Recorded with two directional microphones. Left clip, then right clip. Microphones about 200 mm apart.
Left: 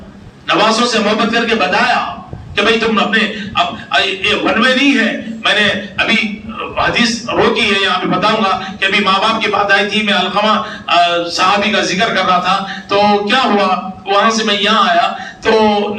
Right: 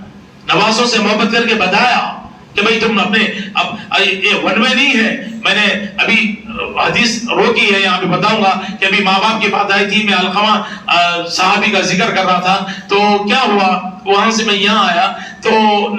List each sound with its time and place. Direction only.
0.4 s a man's voice: 50° left (ahead or behind)